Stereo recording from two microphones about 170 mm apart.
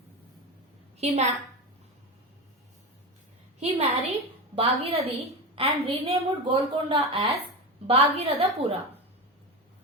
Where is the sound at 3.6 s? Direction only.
35° right (ahead or behind).